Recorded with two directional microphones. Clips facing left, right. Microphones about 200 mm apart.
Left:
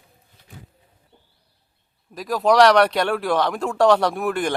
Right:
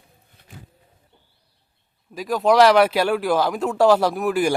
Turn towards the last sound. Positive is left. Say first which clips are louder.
# right 2 dB
turn(degrees=-5)  # may be behind; listen again after turning